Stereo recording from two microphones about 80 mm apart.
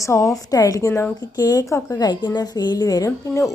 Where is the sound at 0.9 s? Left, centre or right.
Left.